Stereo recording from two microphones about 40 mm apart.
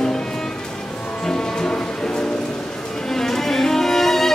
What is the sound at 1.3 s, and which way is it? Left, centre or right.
Music, centre.